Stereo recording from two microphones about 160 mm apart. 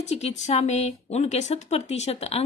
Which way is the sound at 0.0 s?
40° left (ahead or behind).